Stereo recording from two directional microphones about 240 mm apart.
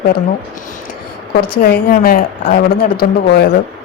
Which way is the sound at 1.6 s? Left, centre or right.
Left.